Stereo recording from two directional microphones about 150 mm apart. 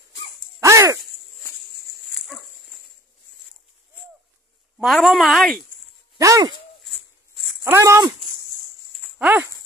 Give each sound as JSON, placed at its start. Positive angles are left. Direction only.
{"t": 0.6, "sound": "sigh", "side_deg": -20}
{"t": 4.7, "sound": "a woman's voice", "side_deg": 0}
{"t": 6.1, "sound": "speech", "side_deg": -20}
{"t": 6.9, "sound": "a sound", "side_deg": 0}
{"t": 7.6, "sound": "speech", "side_deg": -20}
{"t": 9.2, "sound": "speech", "side_deg": -10}